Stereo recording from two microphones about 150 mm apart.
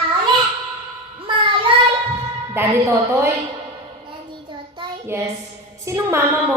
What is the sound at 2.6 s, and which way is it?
Speech, 20° right (ahead or behind).